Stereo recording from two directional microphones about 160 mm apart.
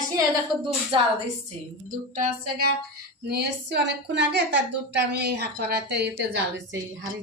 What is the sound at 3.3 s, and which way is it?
A woman's voice, 90° right.